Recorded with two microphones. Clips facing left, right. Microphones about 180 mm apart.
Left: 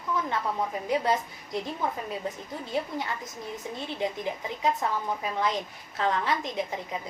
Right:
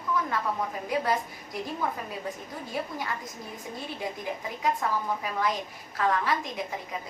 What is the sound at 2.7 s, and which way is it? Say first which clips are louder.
Speech: left 2 dB; 25° left (ahead or behind).